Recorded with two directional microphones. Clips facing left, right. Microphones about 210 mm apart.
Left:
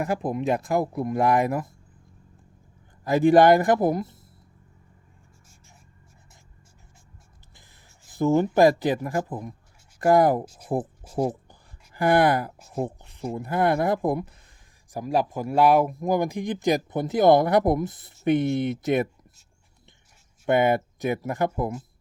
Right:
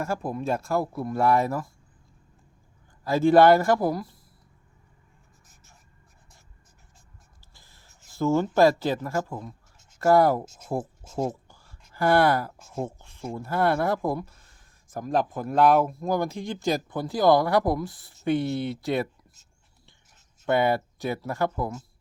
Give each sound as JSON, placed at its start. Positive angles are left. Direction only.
{"t": 0.0, "sound": "speech", "side_deg": 20}
{"t": 3.0, "sound": "speech", "side_deg": 15}
{"t": 8.0, "sound": "speech", "side_deg": 15}
{"t": 20.4, "sound": "speech", "side_deg": 15}